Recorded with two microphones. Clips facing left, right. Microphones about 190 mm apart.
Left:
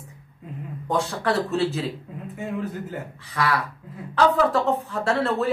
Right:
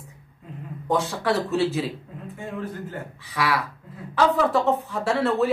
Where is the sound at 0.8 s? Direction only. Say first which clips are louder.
Right 1 dB; centre (ahead or behind).